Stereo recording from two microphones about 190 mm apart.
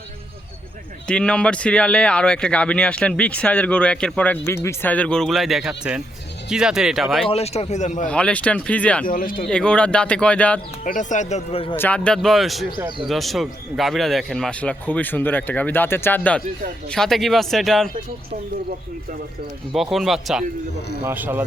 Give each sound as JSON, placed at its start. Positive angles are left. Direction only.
{"t": 1.0, "sound": "speech", "side_deg": 5}
{"t": 7.3, "sound": "speech", "side_deg": 35}
{"t": 8.0, "sound": "a man's voice", "side_deg": 5}
{"t": 9.0, "sound": "speech", "side_deg": 45}
{"t": 9.5, "sound": "speech", "side_deg": 5}
{"t": 10.8, "sound": "speech", "side_deg": 40}
{"t": 11.8, "sound": "a man's voice", "side_deg": 5}
{"t": 19.7, "sound": "speech", "side_deg": 0}